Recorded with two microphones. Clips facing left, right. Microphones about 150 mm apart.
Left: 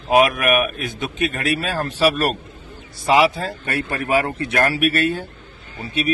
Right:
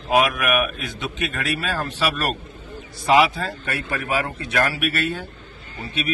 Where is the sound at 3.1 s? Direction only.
35° left (ahead or behind).